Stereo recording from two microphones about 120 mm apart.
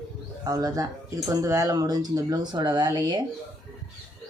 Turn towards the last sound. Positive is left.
turn(degrees=-30)  # may be behind; listen again after turning